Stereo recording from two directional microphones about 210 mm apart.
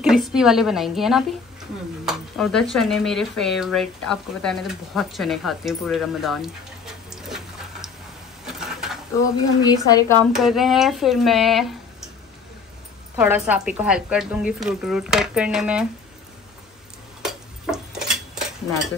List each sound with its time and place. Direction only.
0.0 s a woman's voice: centre (ahead or behind)
8.5 s a sound: 5° right (ahead or behind)
9.6 s a woman's voice: 20° left (ahead or behind)
10.3 s a woman's voice: centre (ahead or behind)
13.1 s a woman's voice: 10° right (ahead or behind)
17.2 s dishes: 5° right (ahead or behind)